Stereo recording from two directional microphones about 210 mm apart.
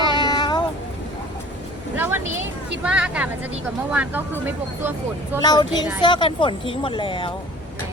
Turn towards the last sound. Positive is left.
turn(degrees=25)  # may be behind; listen again after turning